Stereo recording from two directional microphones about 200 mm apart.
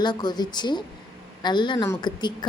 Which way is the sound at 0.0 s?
20° left (ahead or behind).